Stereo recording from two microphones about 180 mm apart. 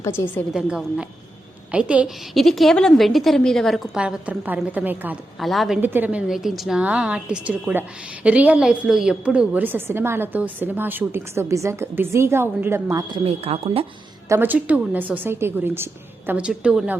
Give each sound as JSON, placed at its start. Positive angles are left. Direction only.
{"t": 0.0, "sound": "a woman's voice", "side_deg": 15}
{"t": 0.5, "sound": "a woman's voice", "side_deg": -5}
{"t": 13.2, "sound": "speech", "side_deg": -35}
{"t": 14.3, "sound": "a woman's voice", "side_deg": -10}